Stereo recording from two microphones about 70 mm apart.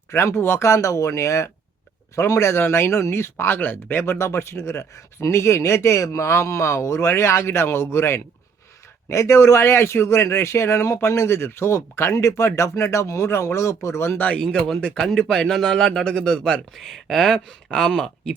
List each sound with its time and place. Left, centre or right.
0.1 s speech: left
4.0 s speech: left
14.2 s speech: centre